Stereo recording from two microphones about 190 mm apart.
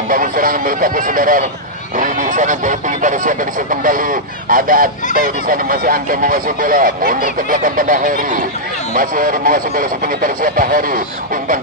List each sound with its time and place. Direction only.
0.1 s speech: 45° right (ahead or behind)